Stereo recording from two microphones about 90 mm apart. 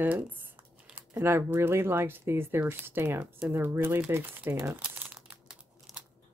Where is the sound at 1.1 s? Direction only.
25° right (ahead or behind).